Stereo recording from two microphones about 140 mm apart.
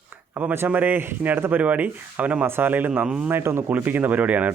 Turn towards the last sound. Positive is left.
turn(degrees=-10)  # may be behind; listen again after turning